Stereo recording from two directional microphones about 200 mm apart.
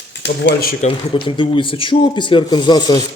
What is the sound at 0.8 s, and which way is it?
Speech, 25° left (ahead or behind).